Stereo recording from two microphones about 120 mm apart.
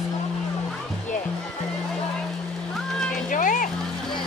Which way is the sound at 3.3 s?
90° left.